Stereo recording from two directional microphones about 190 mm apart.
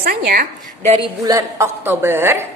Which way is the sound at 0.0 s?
50° right (ahead or behind).